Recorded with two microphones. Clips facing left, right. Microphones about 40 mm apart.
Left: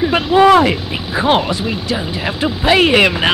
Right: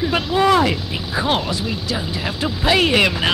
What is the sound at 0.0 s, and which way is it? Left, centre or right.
Speech, left.